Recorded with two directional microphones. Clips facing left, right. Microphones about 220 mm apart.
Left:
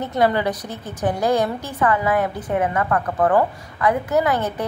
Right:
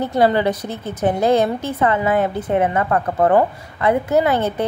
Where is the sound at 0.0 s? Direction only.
30° right (ahead or behind).